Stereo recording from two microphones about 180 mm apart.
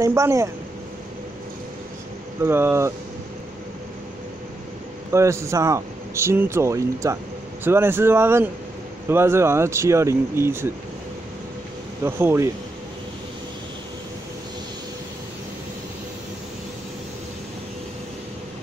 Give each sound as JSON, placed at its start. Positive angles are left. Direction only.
{"t": 0.0, "sound": "speech", "side_deg": -15}
{"t": 2.4, "sound": "speech", "side_deg": -15}
{"t": 5.1, "sound": "speech", "side_deg": -15}
{"t": 12.0, "sound": "speech", "side_deg": -15}